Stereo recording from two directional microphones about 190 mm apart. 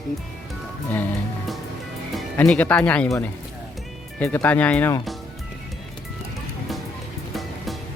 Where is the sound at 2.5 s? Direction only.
5° left (ahead or behind).